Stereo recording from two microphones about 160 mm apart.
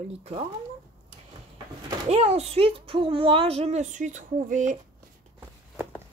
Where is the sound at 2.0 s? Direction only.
40° right (ahead or behind).